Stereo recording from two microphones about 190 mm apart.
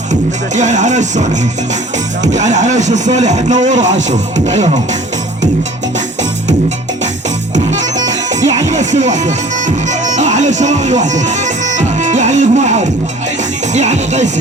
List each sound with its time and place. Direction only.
0.5 s speech: 40° right (ahead or behind)
8.6 s music: 35° right (ahead or behind)
13.7 s speech: 35° right (ahead or behind)